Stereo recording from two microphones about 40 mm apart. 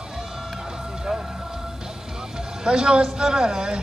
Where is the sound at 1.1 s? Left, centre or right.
Centre.